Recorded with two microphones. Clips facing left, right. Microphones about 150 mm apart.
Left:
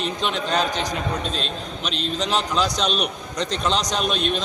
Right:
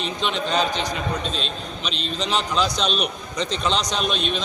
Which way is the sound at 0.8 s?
45° left (ahead or behind).